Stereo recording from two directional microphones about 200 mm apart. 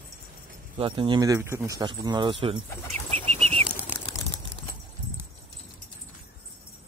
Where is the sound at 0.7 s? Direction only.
25° right (ahead or behind).